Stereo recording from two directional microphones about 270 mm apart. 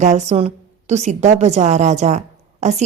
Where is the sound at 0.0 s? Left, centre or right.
Right.